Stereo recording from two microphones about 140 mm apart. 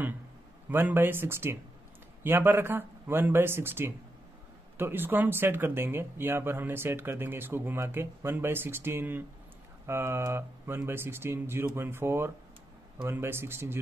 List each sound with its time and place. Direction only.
0.7 s speech: 15° right (ahead or behind)